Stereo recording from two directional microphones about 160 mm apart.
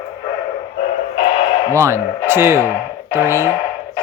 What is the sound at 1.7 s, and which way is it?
A man's voice, 15° right (ahead or behind).